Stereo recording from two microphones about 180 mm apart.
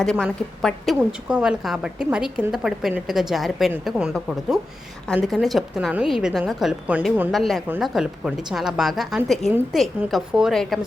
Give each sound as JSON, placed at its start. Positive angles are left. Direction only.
{"t": 0.0, "sound": "a woman's voice", "side_deg": 5}